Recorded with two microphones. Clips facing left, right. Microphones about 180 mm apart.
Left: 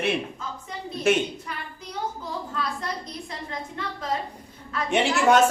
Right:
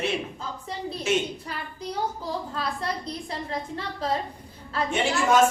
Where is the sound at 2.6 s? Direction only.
30° right (ahead or behind).